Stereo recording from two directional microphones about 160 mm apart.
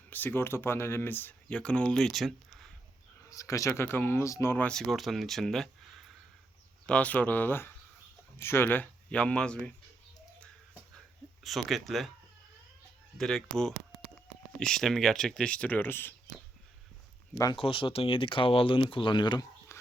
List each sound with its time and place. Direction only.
0.1 s speech: 10° left (ahead or behind)
3.2 s speech: 20° left (ahead or behind)
11.4 s speech: centre (ahead or behind)
13.1 s speech: centre (ahead or behind)
17.3 s speech: 20° left (ahead or behind)
17.6 s speech: 35° left (ahead or behind)
19.7 s a sound: 20° left (ahead or behind)